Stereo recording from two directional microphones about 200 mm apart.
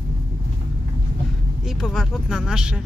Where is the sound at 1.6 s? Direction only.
Centre (ahead or behind).